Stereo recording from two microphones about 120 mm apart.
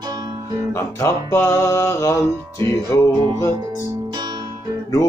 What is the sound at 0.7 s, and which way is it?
Music, 25° left (ahead or behind).